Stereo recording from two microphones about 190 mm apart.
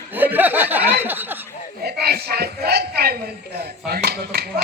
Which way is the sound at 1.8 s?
55° right (ahead or behind).